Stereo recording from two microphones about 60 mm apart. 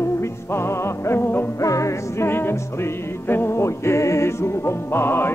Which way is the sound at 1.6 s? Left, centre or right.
Left.